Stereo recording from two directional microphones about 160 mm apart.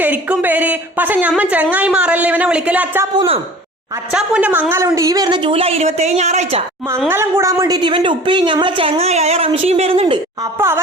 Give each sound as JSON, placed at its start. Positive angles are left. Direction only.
{"t": 0.0, "sound": "speech", "side_deg": -10}
{"t": 3.2, "sound": "a woman's voice", "side_deg": -35}
{"t": 4.1, "sound": "a woman's voice", "side_deg": -5}
{"t": 7.1, "sound": "a woman's voice", "side_deg": -15}
{"t": 10.4, "sound": "speech", "side_deg": -15}